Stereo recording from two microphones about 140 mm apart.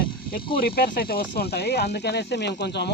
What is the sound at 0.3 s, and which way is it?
Speech, 90° left.